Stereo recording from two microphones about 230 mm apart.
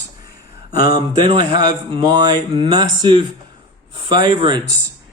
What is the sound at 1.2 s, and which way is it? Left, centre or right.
A man's voice, centre.